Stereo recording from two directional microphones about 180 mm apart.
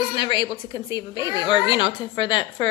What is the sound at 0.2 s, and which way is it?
A woman's voice, 25° left (ahead or behind).